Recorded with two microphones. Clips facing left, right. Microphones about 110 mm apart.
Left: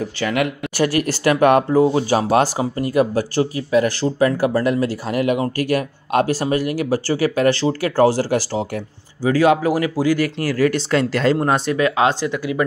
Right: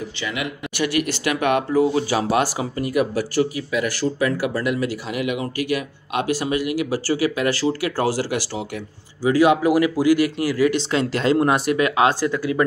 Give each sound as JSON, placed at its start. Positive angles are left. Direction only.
{"t": 0.2, "sound": "speech", "side_deg": 50}
{"t": 0.7, "sound": "speech", "side_deg": 35}
{"t": 10.5, "sound": "speech", "side_deg": 45}
{"t": 11.3, "sound": "speech", "side_deg": 30}